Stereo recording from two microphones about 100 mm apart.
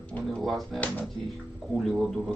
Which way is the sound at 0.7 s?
15° left (ahead or behind).